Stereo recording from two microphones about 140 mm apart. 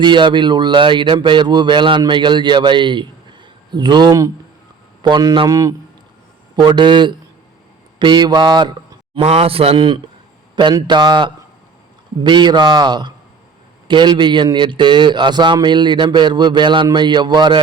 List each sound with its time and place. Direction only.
0.0 s a man's voice: 35° right (ahead or behind)
6.7 s speech: 35° right (ahead or behind)
9.1 s speech: 45° right (ahead or behind); by 17.6 s 30° right (ahead or behind)